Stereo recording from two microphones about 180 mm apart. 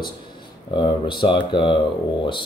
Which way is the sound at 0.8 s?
25° left (ahead or behind).